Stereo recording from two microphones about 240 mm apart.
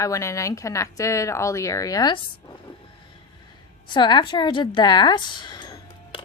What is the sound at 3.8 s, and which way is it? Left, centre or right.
A woman's voice, centre.